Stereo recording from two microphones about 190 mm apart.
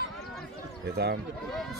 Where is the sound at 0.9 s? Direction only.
55° right (ahead or behind).